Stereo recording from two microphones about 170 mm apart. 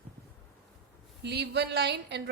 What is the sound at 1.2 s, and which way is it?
Speech, 80° right.